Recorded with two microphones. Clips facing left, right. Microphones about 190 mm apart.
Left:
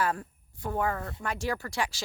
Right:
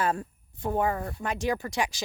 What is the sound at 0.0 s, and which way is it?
Speech, 25° right (ahead or behind).